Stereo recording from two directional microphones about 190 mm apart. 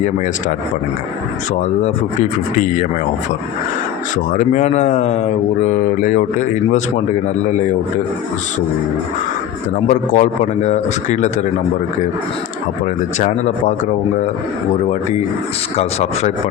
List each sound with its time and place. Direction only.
0.0 s speech: 40° left (ahead or behind)
1.8 s speech: 40° left (ahead or behind)
4.1 s speech: 40° left (ahead or behind)
9.9 s speech: 40° left (ahead or behind)
12.8 s speech: 40° left (ahead or behind)
15.7 s speech: 35° left (ahead or behind)